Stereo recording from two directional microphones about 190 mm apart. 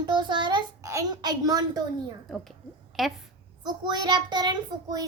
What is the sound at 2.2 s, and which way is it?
Speech, centre (ahead or behind).